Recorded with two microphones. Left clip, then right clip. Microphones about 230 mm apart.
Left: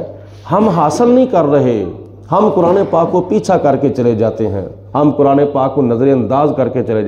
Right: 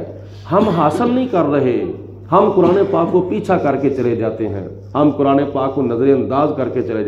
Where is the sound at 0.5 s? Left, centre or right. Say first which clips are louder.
Left 2 dB; left.